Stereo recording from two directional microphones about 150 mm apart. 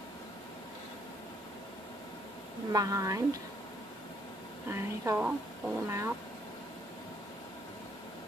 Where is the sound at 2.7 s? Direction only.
25° right (ahead or behind).